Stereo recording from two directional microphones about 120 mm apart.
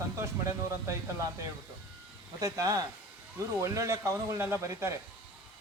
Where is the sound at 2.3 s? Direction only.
30° right (ahead or behind).